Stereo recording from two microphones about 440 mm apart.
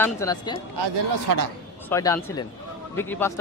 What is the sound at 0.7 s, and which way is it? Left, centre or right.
Speech, right.